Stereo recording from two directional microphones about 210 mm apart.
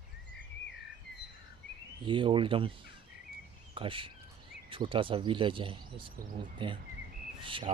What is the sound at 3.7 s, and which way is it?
Speech, 25° right (ahead or behind).